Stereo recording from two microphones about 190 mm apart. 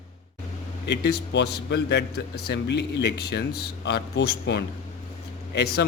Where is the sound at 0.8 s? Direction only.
60° left (ahead or behind).